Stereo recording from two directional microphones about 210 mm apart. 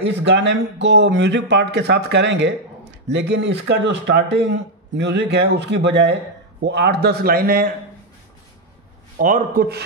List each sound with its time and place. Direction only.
0.0 s a man's voice: 55° right (ahead or behind)
9.2 s a man's voice: 40° right (ahead or behind)